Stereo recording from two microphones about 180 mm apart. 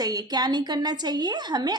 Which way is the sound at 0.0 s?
20° right (ahead or behind).